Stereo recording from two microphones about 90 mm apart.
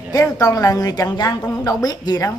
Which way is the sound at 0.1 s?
40° left (ahead or behind).